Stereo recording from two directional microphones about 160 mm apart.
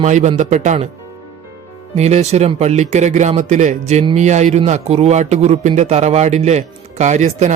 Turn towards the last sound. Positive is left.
turn(degrees=-45)  # may be behind; listen again after turning